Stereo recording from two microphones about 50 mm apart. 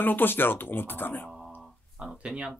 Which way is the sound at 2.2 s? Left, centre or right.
Centre.